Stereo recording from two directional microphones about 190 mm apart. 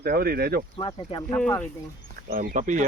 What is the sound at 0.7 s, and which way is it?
Speech, 25° left (ahead or behind).